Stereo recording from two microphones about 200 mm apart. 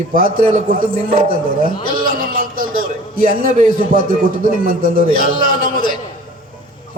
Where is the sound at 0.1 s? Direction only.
45° right (ahead or behind).